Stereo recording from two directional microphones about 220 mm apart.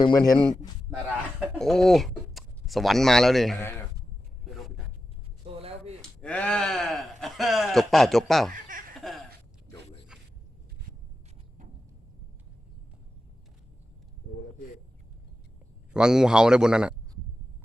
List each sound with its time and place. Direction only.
0.0 s a man's voice: 20° left (ahead or behind)
1.4 s speech: centre (ahead or behind)
5.5 s a sound: 25° right (ahead or behind)
6.0 s speech: 5° left (ahead or behind)
9.0 s a sound: centre (ahead or behind)
15.9 s a man's voice: 5° right (ahead or behind)